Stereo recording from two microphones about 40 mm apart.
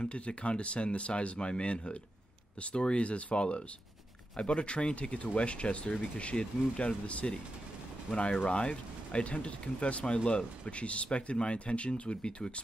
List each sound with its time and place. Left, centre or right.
0.0 s speech: left